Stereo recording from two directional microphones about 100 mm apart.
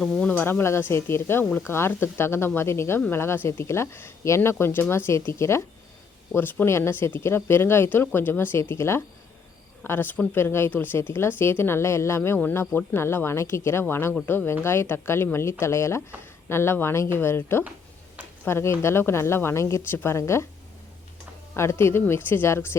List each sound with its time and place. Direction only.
0.0 s speech: 5° left (ahead or behind)
0.3 s speech: 20° left (ahead or behind)
21.5 s speech: 25° left (ahead or behind)